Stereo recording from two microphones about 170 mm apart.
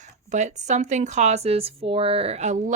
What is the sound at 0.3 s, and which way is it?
Speech, 45° right (ahead or behind).